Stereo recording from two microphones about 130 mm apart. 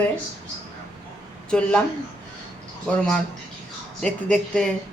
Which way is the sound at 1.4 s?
5° left (ahead or behind).